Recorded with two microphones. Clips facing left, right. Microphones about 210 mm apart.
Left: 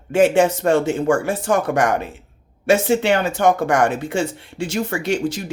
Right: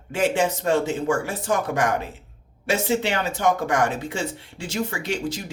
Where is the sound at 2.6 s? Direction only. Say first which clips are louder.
Left 6 dB; 50° left (ahead or behind).